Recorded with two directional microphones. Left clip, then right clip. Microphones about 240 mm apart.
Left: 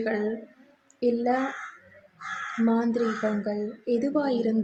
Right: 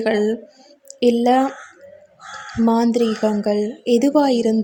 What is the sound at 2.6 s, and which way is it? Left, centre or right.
Speech, right.